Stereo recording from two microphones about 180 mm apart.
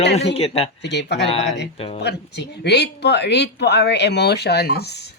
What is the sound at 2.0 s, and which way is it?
Speech, 70° left (ahead or behind).